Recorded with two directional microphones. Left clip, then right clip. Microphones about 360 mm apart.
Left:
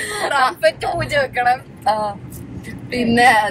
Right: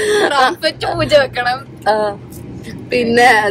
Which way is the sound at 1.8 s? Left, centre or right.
Right.